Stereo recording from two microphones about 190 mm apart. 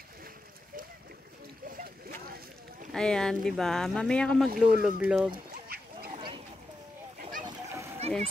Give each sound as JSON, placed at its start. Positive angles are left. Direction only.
{"t": 1.7, "sound": "boat", "side_deg": -45}
{"t": 2.9, "sound": "speech", "side_deg": 5}
{"t": 5.7, "sound": "duck", "side_deg": -50}
{"t": 6.1, "sound": "a sound", "side_deg": -25}
{"t": 7.4, "sound": "splash", "side_deg": -15}